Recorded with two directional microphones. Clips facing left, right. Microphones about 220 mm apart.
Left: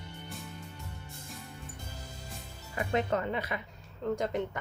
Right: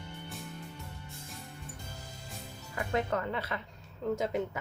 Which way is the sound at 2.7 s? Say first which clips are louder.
Left 2 dB; 20° left (ahead or behind).